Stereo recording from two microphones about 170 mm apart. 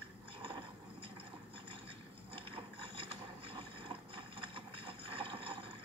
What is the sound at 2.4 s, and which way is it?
Boat, 30° right (ahead or behind).